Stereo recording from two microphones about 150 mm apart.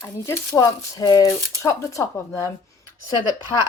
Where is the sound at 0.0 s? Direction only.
20° left (ahead or behind).